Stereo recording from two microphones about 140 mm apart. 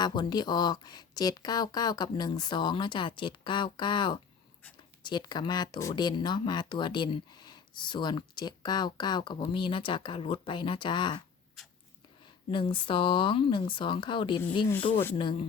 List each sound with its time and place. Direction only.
0.0 s speech: 30° left (ahead or behind)
12.5 s speech: 35° left (ahead or behind)